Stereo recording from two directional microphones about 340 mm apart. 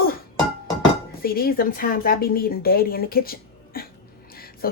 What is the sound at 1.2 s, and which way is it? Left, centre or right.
Speech, left.